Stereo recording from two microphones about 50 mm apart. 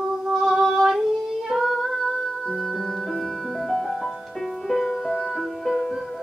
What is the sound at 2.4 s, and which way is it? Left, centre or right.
Music, centre.